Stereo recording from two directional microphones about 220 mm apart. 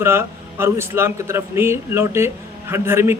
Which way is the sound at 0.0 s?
10° right (ahead or behind).